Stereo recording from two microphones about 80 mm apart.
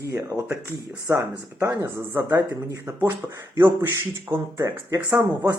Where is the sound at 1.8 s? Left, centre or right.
Right.